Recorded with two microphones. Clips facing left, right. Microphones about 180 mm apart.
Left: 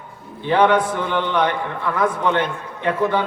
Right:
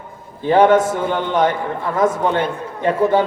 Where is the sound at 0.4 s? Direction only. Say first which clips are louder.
Right 4 dB; 45° right (ahead or behind).